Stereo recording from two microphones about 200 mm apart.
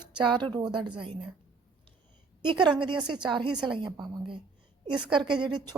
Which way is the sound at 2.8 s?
25° right (ahead or behind).